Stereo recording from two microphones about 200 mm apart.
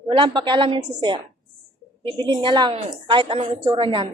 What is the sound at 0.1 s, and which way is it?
A woman's voice, 25° right (ahead or behind).